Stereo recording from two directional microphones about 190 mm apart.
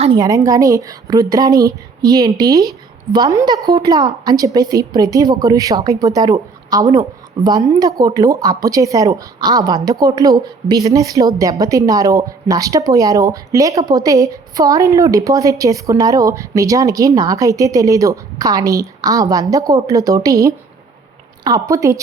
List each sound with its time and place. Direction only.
0.0 s a woman's voice: 20° right (ahead or behind)